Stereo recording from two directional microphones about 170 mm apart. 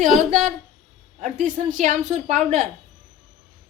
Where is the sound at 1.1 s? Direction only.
45° right (ahead or behind).